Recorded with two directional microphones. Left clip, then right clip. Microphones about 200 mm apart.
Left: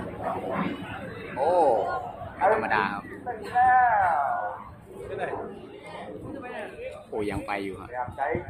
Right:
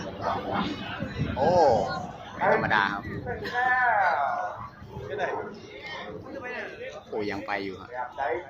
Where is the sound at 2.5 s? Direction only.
5° right (ahead or behind).